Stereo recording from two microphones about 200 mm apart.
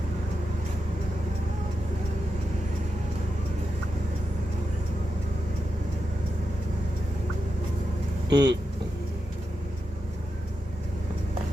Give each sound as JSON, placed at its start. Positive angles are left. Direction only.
{"t": 8.3, "sound": "speech", "side_deg": -60}